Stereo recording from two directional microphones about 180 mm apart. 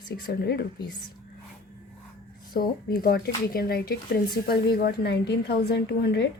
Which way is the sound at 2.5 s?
55° left (ahead or behind).